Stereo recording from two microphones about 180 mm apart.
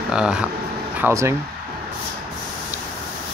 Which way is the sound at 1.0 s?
15° right (ahead or behind).